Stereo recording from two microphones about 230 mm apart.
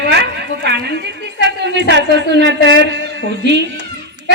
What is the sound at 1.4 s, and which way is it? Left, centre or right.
A woman's voice, right.